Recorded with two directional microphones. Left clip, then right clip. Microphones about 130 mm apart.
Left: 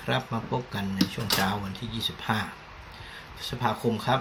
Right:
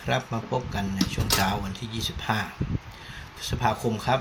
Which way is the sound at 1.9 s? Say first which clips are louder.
Right 1 dB; 15° right (ahead or behind).